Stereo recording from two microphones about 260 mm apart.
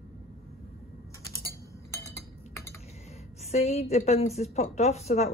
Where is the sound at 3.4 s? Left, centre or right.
Left.